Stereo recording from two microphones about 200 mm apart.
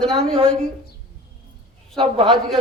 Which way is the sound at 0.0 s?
Centre (ahead or behind).